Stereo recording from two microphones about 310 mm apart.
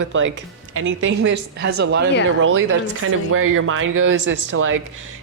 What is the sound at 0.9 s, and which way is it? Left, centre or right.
Speech, right.